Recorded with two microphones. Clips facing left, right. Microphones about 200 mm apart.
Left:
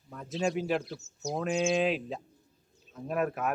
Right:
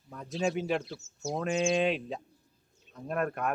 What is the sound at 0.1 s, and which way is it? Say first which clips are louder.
Speech: even; centre (ahead or behind).